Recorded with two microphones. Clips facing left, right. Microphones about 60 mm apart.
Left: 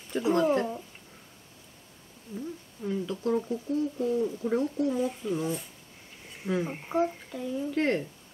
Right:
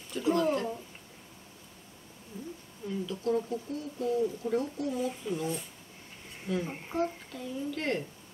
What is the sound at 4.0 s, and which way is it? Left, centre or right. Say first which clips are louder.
Speech: left 2 dB; left.